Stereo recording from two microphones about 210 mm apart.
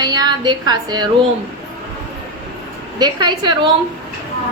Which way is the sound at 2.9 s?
20° right (ahead or behind).